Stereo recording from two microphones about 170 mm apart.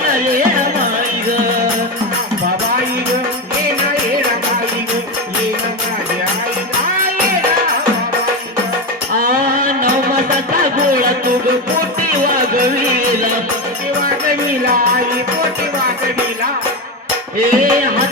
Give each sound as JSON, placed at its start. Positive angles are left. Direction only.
{"t": 0.1, "sound": "music", "side_deg": -55}
{"t": 9.1, "sound": "music", "side_deg": -55}
{"t": 13.1, "sound": "music", "side_deg": -55}
{"t": 17.5, "sound": "music", "side_deg": -55}